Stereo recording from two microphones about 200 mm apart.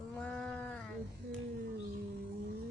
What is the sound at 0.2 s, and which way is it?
Sheep, 5° left (ahead or behind).